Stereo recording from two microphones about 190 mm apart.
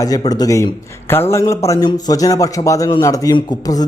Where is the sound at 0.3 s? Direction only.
20° left (ahead or behind).